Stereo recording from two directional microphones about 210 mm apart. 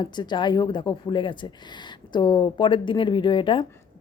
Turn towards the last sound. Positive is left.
turn(degrees=25)  # may be behind; listen again after turning